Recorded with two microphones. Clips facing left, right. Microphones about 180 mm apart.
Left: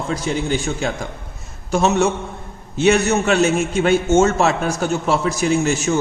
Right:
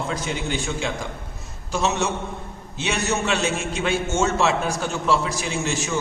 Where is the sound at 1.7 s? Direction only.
50° left (ahead or behind).